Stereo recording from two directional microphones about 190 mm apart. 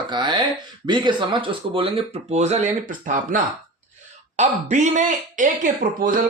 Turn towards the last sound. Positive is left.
turn(degrees=-45)  # may be behind; listen again after turning